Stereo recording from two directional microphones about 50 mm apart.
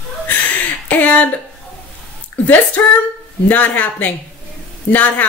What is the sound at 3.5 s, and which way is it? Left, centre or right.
A woman's voice, left.